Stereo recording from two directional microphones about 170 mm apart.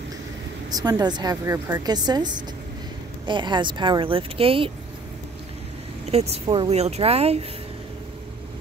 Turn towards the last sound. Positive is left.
turn(degrees=-35)  # may be behind; listen again after turning